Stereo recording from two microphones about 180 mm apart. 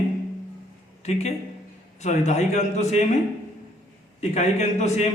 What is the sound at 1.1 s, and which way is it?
A man's voice, 40° left (ahead or behind).